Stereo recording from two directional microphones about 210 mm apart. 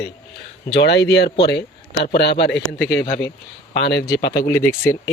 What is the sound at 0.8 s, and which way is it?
Speech, 55° left (ahead or behind).